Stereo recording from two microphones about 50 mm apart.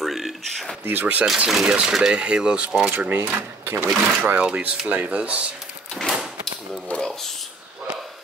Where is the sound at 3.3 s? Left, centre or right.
Right.